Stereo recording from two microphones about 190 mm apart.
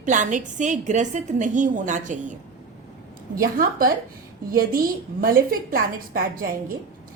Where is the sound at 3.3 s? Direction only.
50° right (ahead or behind).